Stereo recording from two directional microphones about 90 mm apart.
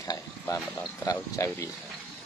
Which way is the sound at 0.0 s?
35° left (ahead or behind).